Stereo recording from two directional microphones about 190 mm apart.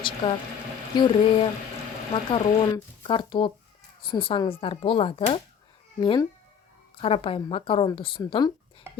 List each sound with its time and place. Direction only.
0.2 s speech: 25° left (ahead or behind)